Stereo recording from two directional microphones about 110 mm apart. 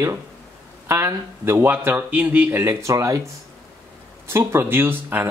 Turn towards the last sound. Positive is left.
turn(degrees=-20)  # may be behind; listen again after turning